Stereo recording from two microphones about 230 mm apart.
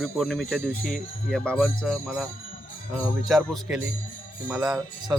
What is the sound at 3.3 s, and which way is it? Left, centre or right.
Speech, centre.